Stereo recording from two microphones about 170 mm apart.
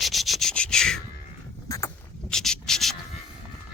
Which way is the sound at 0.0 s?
Centre (ahead or behind).